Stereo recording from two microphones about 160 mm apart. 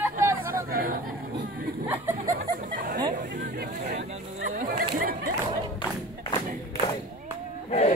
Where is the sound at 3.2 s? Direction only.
65° right (ahead or behind).